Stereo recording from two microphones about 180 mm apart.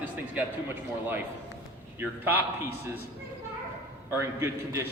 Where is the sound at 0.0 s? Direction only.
10° right (ahead or behind).